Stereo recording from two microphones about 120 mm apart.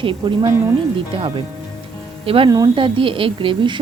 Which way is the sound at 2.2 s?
50° right (ahead or behind).